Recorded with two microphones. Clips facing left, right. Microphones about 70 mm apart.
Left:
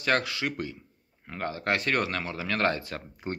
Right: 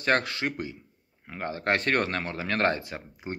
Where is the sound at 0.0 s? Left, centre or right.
Right.